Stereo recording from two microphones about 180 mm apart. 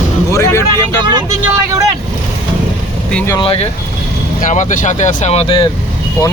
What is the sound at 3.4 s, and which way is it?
Speech, 30° left (ahead or behind).